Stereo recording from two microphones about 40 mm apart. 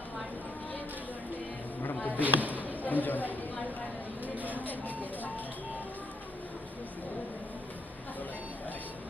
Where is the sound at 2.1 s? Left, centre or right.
Right.